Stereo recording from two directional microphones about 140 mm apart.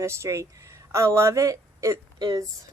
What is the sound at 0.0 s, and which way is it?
Speech, 20° right (ahead or behind).